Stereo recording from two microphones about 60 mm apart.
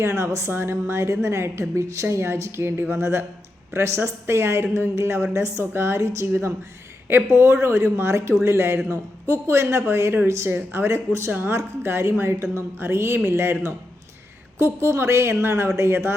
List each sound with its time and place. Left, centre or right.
0.0 s a woman's voice: right
7.3 s a woman's voice: right
11.3 s a woman's voice: right